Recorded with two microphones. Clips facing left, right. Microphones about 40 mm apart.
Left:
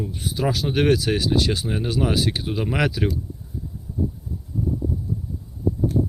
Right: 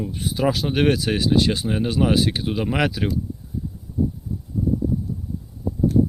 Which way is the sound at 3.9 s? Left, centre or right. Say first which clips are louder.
Right 4 dB; left.